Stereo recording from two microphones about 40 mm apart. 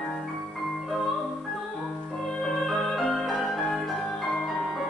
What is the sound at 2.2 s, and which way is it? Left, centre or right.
Music, centre.